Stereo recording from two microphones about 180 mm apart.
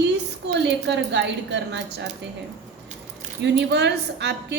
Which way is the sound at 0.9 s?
75° right (ahead or behind).